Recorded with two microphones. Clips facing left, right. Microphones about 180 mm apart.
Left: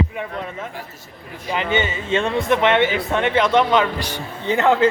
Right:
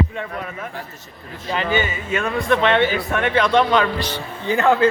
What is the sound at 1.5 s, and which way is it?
Speech, 20° left (ahead or behind).